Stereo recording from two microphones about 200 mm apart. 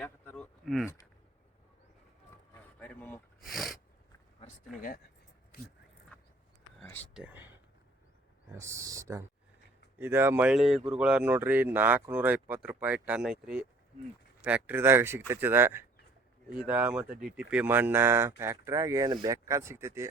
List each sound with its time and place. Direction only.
0.0 s speech: 5° left (ahead or behind)
2.7 s speech: 5° left (ahead or behind)
4.4 s speech: 45° left (ahead or behind)
7.1 s speech: 5° right (ahead or behind)
8.5 s speech: 15° right (ahead or behind)